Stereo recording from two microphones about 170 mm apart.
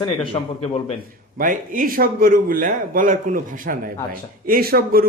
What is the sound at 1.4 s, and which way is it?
A man's voice, 55° right (ahead or behind).